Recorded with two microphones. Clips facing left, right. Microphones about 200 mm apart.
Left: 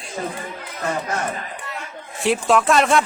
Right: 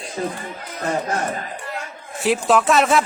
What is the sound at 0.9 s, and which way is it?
Speech, 35° right (ahead or behind).